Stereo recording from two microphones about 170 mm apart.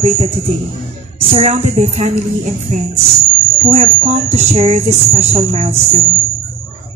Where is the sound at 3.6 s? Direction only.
40° right (ahead or behind).